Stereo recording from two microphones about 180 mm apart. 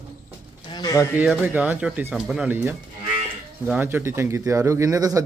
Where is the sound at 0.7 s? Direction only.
20° left (ahead or behind).